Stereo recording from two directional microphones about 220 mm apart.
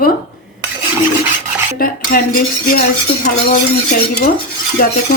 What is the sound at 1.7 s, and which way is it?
A woman's voice, 40° left (ahead or behind).